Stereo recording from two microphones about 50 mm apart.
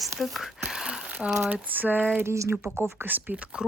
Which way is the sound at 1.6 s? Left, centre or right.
Right.